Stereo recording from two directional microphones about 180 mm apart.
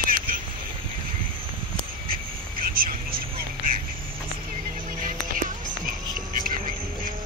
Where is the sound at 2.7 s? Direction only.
55° right (ahead or behind).